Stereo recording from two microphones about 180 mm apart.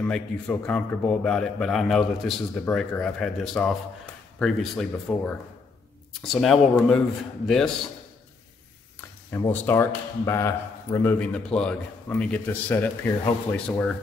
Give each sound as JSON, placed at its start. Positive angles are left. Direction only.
{"t": 0.0, "sound": "a man's voice", "side_deg": 5}
{"t": 9.3, "sound": "a man's voice", "side_deg": 15}